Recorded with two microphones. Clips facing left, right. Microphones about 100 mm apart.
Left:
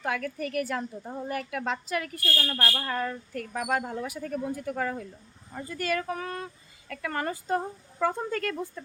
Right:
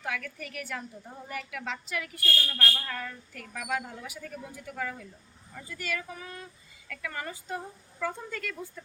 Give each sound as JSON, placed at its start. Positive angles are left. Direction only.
{"t": 0.0, "sound": "speech", "side_deg": 40}
{"t": 6.1, "sound": "child singing", "side_deg": 60}
{"t": 6.8, "sound": "speech", "side_deg": 45}